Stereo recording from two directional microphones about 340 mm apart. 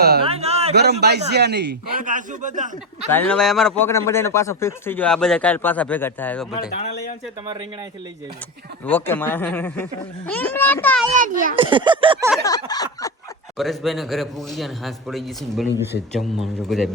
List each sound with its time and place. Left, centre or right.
0.2 s a sound: centre
0.7 s a man's voice: right
3.1 s speech: centre
6.5 s speech: left
8.9 s speech: centre
11.2 s a child's voice: right
12.4 s a sound: centre
13.6 s speech: centre